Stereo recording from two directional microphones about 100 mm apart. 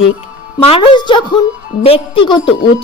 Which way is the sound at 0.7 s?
55° left (ahead or behind).